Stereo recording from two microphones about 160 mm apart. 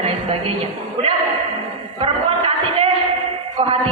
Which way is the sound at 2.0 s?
35° right (ahead or behind).